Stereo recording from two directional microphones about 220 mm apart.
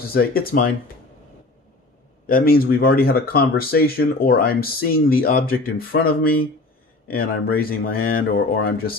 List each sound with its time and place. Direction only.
0.0 s speech: 45° left (ahead or behind)
2.2 s speech: 40° left (ahead or behind)